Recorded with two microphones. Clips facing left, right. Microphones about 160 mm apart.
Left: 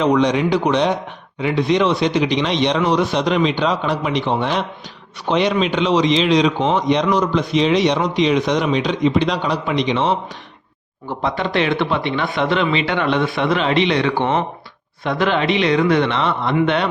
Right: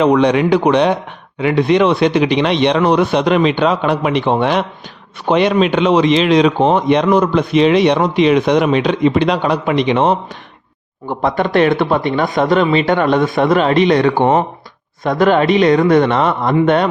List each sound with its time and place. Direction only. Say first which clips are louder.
0.0 s a man's voice: right 4 dB; 60° right (ahead or behind)
11.2 s speech: right 6 dB; 50° right (ahead or behind)